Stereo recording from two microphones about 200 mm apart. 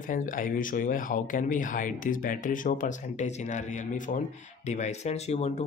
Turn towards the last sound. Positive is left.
turn(degrees=30)  # may be behind; listen again after turning